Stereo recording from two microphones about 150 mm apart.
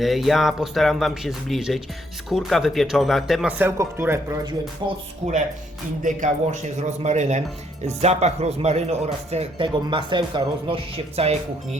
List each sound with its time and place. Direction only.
0.0 s speech: centre (ahead or behind)
3.6 s speech: 15° right (ahead or behind)
4.8 s speech: 30° right (ahead or behind)
6.0 s speech: 60° right (ahead or behind); by 11.8 s 45° right (ahead or behind)